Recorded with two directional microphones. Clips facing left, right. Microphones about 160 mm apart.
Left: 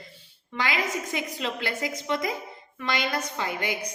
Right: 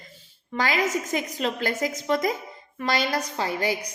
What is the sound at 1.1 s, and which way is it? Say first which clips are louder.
A woman's voice: right 4 dB; 40° right (ahead or behind).